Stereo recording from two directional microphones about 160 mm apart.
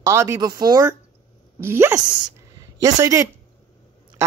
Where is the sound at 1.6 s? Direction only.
15° right (ahead or behind).